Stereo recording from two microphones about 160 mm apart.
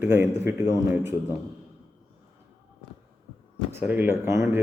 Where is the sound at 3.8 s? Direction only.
15° right (ahead or behind).